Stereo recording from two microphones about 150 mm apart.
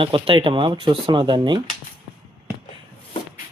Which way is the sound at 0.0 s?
35° right (ahead or behind).